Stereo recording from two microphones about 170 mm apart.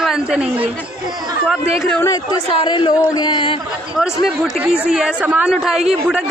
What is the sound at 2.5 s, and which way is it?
Speech, 30° left (ahead or behind).